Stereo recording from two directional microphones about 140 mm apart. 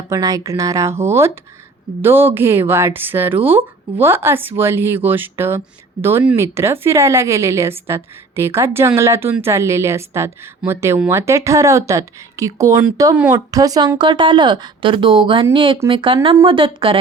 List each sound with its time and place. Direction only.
0.1 s a woman's voice: 25° right (ahead or behind)